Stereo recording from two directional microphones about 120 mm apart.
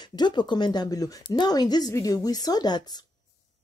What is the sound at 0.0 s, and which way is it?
A woman's voice, 35° left (ahead or behind).